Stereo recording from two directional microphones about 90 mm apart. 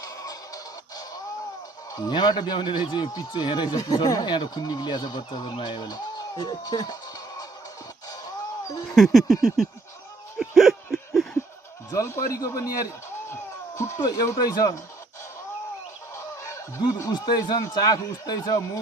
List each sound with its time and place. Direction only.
0.0 s music: 40° left (ahead or behind)
1.9 s speech: 50° left (ahead or behind)
9.0 s a sound: 5° left (ahead or behind)
11.9 s a man's voice: 30° left (ahead or behind)
12.4 s speech: 45° left (ahead or behind)
16.4 s snicker: 35° left (ahead or behind)
17.1 s speech: 55° left (ahead or behind)